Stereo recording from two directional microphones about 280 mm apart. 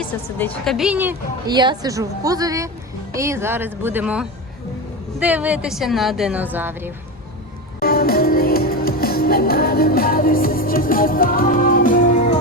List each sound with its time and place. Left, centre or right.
0.0 s a woman's voice: centre
7.8 s music: left